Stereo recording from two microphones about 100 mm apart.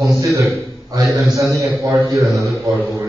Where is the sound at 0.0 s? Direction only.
30° right (ahead or behind).